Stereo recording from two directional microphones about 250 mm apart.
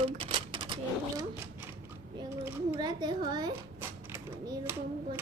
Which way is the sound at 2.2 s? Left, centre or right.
Centre.